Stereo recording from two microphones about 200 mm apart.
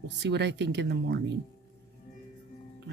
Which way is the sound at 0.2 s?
60° right (ahead or behind).